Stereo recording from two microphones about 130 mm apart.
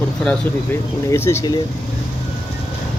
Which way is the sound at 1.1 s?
20° left (ahead or behind).